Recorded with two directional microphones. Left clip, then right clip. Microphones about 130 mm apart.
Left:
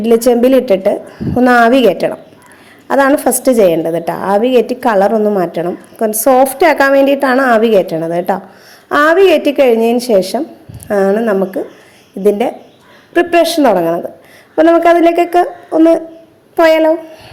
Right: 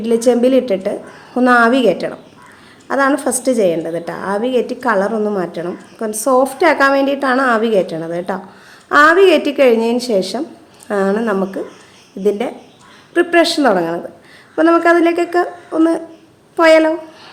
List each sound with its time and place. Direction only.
0.0 s a woman's voice: 30° left (ahead or behind)